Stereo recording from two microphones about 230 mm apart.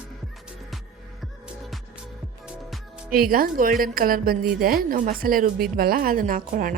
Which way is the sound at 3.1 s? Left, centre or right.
Right.